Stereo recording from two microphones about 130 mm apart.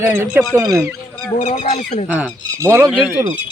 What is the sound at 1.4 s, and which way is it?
Speech, 60° left (ahead or behind).